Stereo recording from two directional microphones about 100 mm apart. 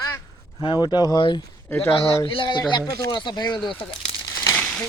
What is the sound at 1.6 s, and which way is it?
Speech, 20° left (ahead or behind).